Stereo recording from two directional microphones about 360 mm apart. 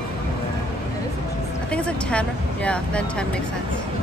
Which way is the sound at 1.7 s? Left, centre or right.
Centre.